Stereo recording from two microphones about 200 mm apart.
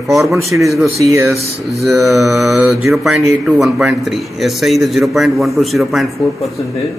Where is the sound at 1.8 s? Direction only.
Centre (ahead or behind).